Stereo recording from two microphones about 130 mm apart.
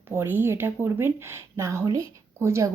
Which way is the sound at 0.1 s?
20° right (ahead or behind).